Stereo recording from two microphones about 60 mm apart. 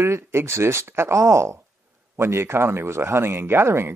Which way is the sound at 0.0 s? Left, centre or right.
Right.